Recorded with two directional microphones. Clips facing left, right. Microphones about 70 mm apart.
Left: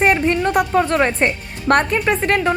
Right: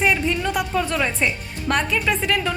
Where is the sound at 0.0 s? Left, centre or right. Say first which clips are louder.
Left 5 dB; left.